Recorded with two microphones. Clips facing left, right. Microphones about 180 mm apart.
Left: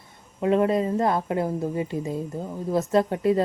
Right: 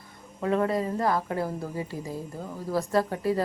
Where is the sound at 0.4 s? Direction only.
20° left (ahead or behind).